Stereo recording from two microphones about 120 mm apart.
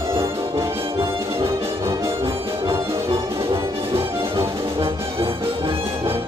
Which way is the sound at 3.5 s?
50° right (ahead or behind).